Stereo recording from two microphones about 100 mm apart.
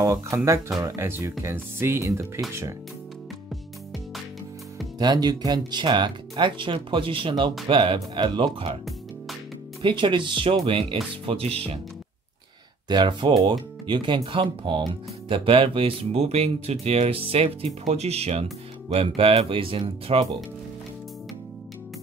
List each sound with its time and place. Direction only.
0.0 s speech: 30° right (ahead or behind)
4.9 s speech: 45° right (ahead or behind)
9.8 s speech: 55° right (ahead or behind)
11.2 s speech: 75° right (ahead or behind)
12.8 s speech: 50° right (ahead or behind); by 17.6 s 75° right (ahead or behind)
17.9 s speech: 90° right; by 20.2 s 65° right (ahead or behind)